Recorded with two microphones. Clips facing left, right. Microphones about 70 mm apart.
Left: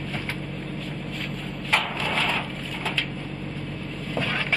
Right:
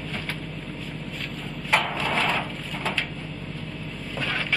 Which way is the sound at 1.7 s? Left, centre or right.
Centre.